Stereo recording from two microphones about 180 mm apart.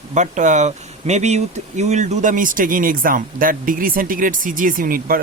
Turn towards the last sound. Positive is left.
turn(degrees=-55)  # may be behind; listen again after turning